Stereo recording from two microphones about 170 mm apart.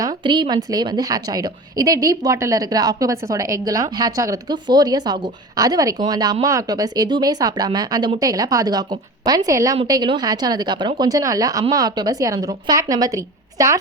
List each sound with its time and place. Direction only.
0.0 s a woman's voice: 25° right (ahead or behind)